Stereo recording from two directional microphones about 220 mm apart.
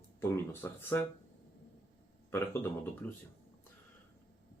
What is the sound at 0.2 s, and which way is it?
Speech, 10° left (ahead or behind).